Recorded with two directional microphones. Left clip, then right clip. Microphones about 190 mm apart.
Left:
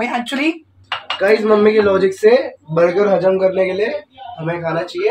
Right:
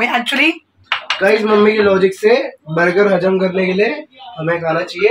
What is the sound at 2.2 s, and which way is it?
Speech, 40° right (ahead or behind).